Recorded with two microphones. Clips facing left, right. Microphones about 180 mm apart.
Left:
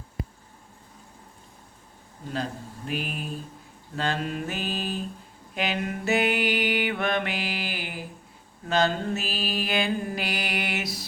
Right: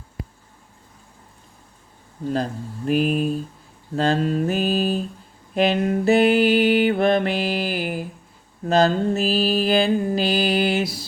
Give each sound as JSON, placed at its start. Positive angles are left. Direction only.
{"t": 2.3, "sound": "mantra", "side_deg": -40}